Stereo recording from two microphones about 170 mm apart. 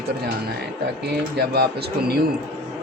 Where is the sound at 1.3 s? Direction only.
70° right (ahead or behind).